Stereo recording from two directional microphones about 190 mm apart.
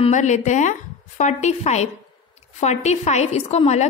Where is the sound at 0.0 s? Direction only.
40° left (ahead or behind).